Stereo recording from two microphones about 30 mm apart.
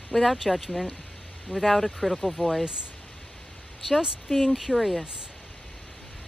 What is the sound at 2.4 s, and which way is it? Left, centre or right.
Speech, centre.